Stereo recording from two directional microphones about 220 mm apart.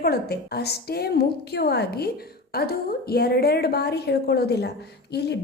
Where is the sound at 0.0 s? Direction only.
45° left (ahead or behind).